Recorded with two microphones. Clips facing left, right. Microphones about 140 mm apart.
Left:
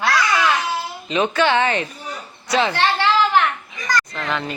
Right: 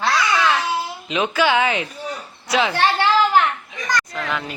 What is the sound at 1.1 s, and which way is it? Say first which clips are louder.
Speech: left 1 dB; 5° right (ahead or behind).